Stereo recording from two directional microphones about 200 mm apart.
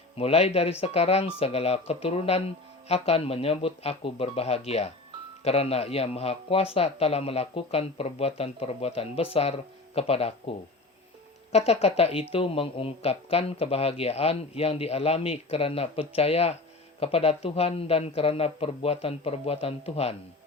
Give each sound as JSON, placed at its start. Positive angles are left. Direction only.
{"t": 0.2, "sound": "speech", "side_deg": 30}
{"t": 11.5, "sound": "speech", "side_deg": 30}